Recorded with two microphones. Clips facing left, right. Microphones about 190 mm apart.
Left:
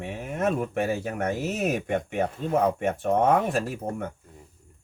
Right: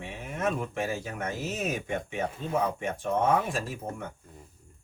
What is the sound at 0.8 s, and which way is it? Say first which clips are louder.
Speech: left 5 dB; 60° left (ahead or behind).